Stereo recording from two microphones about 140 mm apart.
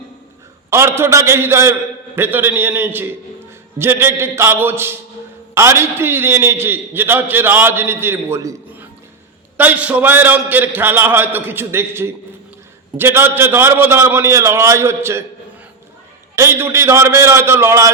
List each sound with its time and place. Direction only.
0.7 s a man's voice: 20° right (ahead or behind)
16.3 s a man's voice: 20° right (ahead or behind)